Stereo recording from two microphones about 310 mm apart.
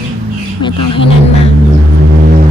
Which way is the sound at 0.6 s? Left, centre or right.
Centre.